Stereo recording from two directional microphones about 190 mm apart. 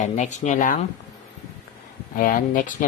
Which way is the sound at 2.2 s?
45° left (ahead or behind).